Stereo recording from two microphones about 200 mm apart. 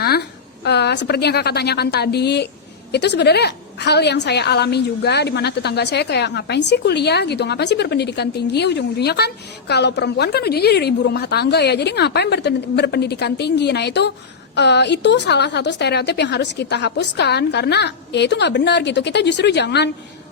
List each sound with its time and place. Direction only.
0.0 s a woman's voice: 55° left (ahead or behind)